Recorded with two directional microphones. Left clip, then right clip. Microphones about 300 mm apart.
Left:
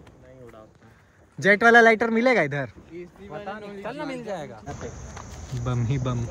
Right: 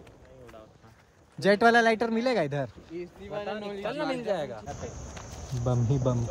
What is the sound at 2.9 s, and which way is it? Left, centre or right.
Speech, right.